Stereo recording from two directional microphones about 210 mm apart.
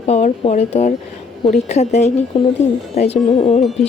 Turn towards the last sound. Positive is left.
turn(degrees=30)  # may be behind; listen again after turning